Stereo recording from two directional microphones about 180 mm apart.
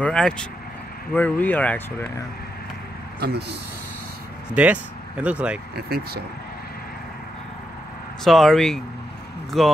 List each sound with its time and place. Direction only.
0.0 s speech: 5° left (ahead or behind)
3.2 s speech: 65° right (ahead or behind)
4.5 s speech: 5° right (ahead or behind)
5.8 s speech: 55° right (ahead or behind)
8.2 s speech: centre (ahead or behind)